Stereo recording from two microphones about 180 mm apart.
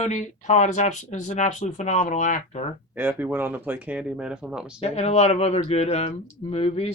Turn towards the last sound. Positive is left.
turn(degrees=35)  # may be behind; listen again after turning